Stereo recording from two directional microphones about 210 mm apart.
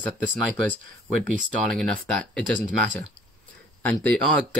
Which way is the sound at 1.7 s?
5° left (ahead or behind).